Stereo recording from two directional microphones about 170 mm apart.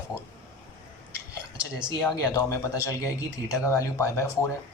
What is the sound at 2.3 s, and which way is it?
Speech, 20° left (ahead or behind).